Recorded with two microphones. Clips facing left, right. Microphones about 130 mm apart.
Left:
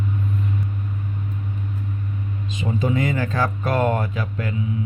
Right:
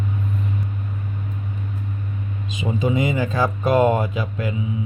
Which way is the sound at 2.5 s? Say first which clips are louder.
Right 1 dB; 10° right (ahead or behind).